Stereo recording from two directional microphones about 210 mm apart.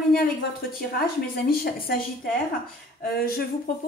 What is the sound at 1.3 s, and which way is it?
Speech, 45° left (ahead or behind).